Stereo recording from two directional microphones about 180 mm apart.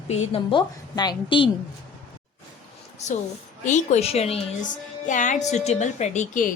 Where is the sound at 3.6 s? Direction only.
40° left (ahead or behind).